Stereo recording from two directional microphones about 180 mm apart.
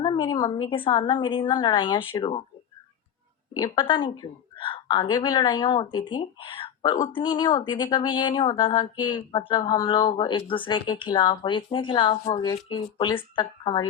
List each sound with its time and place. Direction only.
0.0 s a woman's voice: 25° left (ahead or behind)
3.5 s a woman's voice: 25° left (ahead or behind)